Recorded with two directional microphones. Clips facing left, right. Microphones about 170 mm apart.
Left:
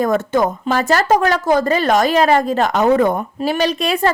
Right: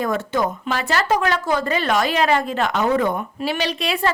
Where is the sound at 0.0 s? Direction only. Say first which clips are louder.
Left 5 dB; 45° left (ahead or behind).